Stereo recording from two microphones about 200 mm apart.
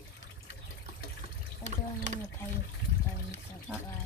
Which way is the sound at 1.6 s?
35° right (ahead or behind).